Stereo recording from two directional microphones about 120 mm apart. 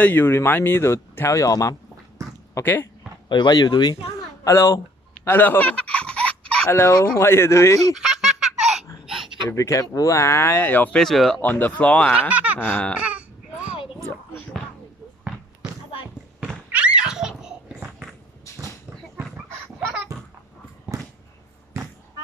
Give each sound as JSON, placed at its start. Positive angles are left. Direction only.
{"t": 0.0, "sound": "speech", "side_deg": 15}
{"t": 2.5, "sound": "speech", "side_deg": 20}
{"t": 3.3, "sound": "speech", "side_deg": 35}
{"t": 4.5, "sound": "speech", "side_deg": 25}
{"t": 5.2, "sound": "a sound", "side_deg": 15}
{"t": 6.7, "sound": "speech", "side_deg": 20}
{"t": 9.5, "sound": "speech", "side_deg": 25}
{"t": 11.4, "sound": "speech", "side_deg": 15}
{"t": 12.2, "sound": "speech", "side_deg": -15}
{"t": 12.5, "sound": "speech", "side_deg": 15}
{"t": 13.0, "sound": "baby cry", "side_deg": -10}
{"t": 16.7, "sound": "belly laugh", "side_deg": -10}
{"t": 19.1, "sound": "a sound", "side_deg": -10}